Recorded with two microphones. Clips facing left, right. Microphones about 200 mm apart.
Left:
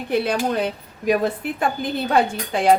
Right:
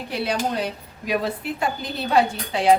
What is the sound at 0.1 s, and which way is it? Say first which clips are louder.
Speech: left 4 dB; 50° left (ahead or behind).